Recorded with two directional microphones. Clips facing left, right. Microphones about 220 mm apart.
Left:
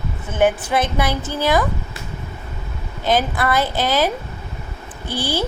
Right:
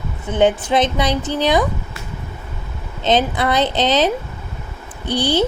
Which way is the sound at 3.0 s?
20° right (ahead or behind).